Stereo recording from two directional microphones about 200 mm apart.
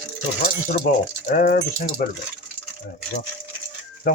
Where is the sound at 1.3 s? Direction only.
45° left (ahead or behind).